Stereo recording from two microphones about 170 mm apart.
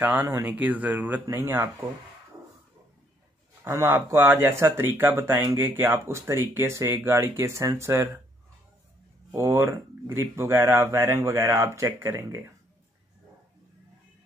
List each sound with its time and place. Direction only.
0.0 s speech: 10° right (ahead or behind)
3.6 s speech: 15° right (ahead or behind)
9.3 s speech: 15° right (ahead or behind)